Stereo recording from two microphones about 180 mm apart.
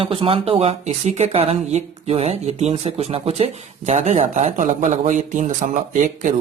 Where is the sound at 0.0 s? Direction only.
30° right (ahead or behind).